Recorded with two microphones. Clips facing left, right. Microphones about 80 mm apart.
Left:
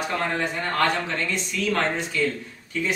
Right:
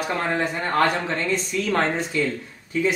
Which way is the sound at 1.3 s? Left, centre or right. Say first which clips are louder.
Right 3 dB; right.